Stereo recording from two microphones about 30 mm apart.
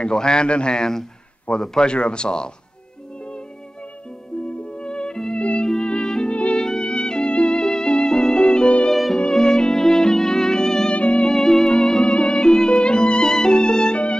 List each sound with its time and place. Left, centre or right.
0.0 s a man's voice: left
1.6 s speech: centre
1.9 s speech: left
4.7 s music: left
5.4 s music: left
5.7 s music: left
6.3 s music: left
6.6 s music: left
7.6 s violin: left
10.9 s music: left
11.2 s music: centre